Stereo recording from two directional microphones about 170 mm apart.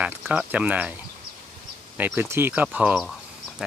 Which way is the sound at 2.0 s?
10° right (ahead or behind).